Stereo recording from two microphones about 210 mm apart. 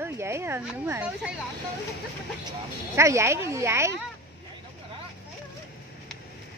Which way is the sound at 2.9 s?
15° right (ahead or behind).